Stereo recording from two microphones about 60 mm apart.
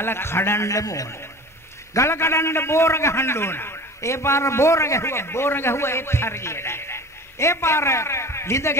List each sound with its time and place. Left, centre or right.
0.0 s a man's voice: left
0.7 s a man's voice: left
2.0 s a man's voice: left
4.0 s a man's voice: left